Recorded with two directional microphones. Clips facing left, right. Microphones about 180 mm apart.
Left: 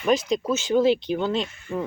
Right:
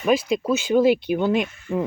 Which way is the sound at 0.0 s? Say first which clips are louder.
Right 2 dB; 5° right (ahead or behind).